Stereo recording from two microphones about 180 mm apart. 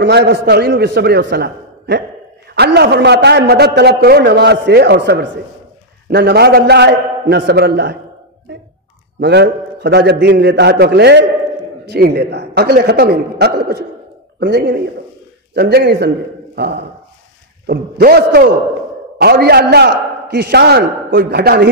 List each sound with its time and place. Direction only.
0.0 s a man's voice: 70° right (ahead or behind)
9.2 s a man's voice: 70° right (ahead or behind)